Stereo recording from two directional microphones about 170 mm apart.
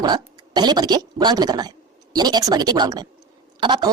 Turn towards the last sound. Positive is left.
turn(degrees=-25)  # may be behind; listen again after turning